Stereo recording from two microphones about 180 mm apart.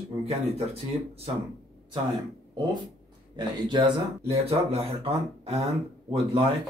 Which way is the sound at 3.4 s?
25° right (ahead or behind).